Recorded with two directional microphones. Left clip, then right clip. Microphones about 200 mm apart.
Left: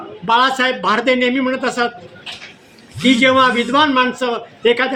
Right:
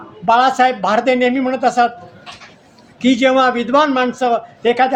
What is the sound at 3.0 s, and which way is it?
A man's voice, 45° right (ahead or behind).